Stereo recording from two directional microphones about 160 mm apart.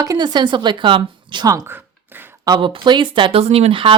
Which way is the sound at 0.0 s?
25° right (ahead or behind).